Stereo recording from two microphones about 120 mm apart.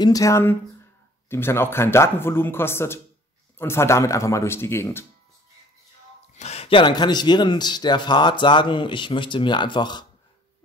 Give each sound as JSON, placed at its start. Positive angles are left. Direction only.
{"t": 0.0, "sound": "speech", "side_deg": 30}
{"t": 6.3, "sound": "a sound", "side_deg": 65}
{"t": 6.7, "sound": "speech", "side_deg": 40}